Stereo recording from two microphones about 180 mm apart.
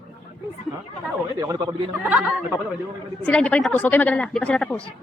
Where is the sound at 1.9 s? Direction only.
10° right (ahead or behind).